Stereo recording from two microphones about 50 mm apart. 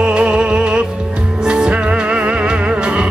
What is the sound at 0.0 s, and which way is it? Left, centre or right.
Music, right.